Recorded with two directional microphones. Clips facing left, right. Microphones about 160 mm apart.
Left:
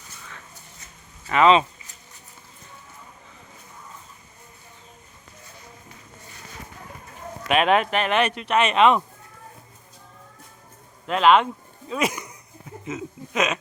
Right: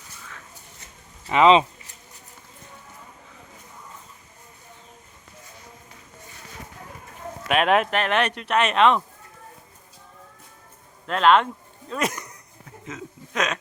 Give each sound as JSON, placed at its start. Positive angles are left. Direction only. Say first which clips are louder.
{"t": 1.3, "sound": "speech", "louder": "right 1 dB", "side_deg": -20}
{"t": 7.4, "sound": "speech", "louder": "left 1 dB", "side_deg": 0}
{"t": 11.0, "sound": "speech", "louder": "left 1 dB", "side_deg": 5}
{"t": 11.9, "sound": "a sound", "louder": "left 2 dB", "side_deg": 0}
{"t": 12.9, "sound": "speech", "louder": "left 4 dB", "side_deg": 5}